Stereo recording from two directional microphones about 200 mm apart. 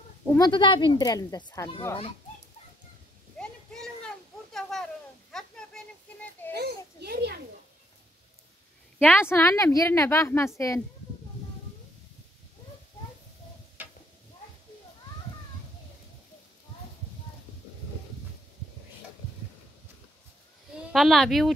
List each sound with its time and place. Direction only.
0.4 s speech: 25° left (ahead or behind)
3.3 s a sound: 5° left (ahead or behind)
6.5 s children playing: 55° right (ahead or behind)
9.0 s a woman's voice: 10° left (ahead or behind)
13.8 s a sound: 10° right (ahead or behind)
20.7 s speech: centre (ahead or behind)